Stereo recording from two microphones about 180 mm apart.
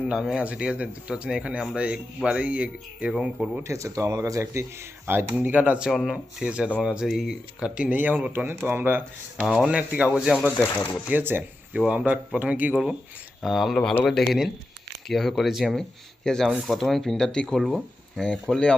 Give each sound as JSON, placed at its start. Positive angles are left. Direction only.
{"t": 0.1, "sound": "speech", "side_deg": -5}
{"t": 3.6, "sound": "speech", "side_deg": -15}